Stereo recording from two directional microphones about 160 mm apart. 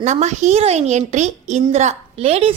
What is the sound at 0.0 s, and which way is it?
A woman's voice, 45° right (ahead or behind).